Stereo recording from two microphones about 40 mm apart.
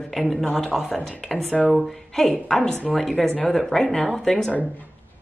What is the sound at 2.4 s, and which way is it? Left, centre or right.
Speech, centre.